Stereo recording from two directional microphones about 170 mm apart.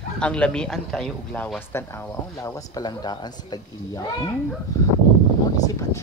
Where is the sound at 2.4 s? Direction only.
25° left (ahead or behind).